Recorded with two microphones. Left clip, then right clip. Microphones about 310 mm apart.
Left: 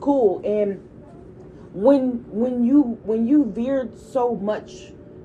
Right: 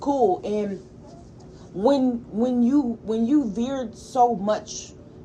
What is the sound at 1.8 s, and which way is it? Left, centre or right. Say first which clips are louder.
A woman's voice: left 3 dB; centre.